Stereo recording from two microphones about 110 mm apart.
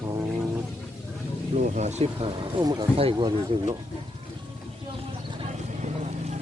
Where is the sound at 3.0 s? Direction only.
50° right (ahead or behind).